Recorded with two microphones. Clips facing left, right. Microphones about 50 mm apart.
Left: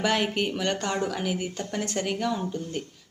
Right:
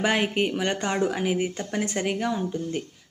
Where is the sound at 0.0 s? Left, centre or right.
Right.